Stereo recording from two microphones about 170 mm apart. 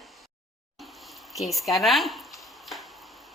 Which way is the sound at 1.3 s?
Centre (ahead or behind).